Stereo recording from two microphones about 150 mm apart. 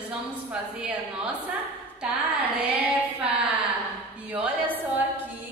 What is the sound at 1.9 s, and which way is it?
Child singing, 10° right (ahead or behind).